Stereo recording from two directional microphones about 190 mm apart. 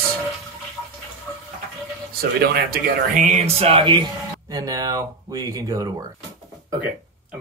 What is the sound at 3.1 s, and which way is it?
Speech, 40° right (ahead or behind).